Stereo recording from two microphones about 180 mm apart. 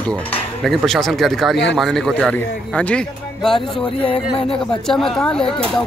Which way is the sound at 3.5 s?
30° left (ahead or behind).